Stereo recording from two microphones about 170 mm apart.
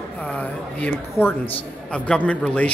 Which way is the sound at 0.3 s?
10° left (ahead or behind).